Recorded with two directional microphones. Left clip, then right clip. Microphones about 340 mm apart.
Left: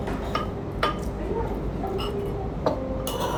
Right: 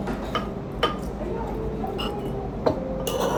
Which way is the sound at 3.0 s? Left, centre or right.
Right.